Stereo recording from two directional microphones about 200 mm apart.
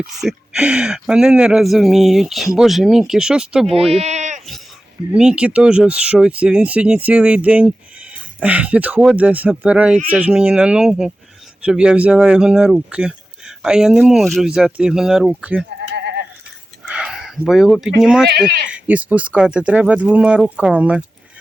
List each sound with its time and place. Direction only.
0.0 s speech: 5° right (ahead or behind)
3.7 s speech: 30° right (ahead or behind)
4.4 s dog: centre (ahead or behind)
5.1 s speech: 5° right (ahead or behind)
16.0 s sheep: 55° right (ahead or behind)
16.8 s a sound: 5° right (ahead or behind)
18.3 s speech: 55° right (ahead or behind)
18.7 s speech: 5° right (ahead or behind)